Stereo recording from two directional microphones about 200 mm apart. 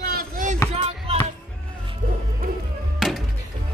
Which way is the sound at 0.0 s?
50° right (ahead or behind).